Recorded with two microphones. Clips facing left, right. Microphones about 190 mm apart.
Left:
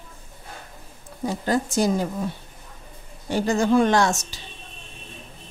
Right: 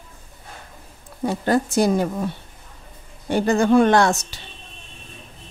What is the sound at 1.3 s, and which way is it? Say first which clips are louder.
Speech: right 3 dB; 60° right (ahead or behind).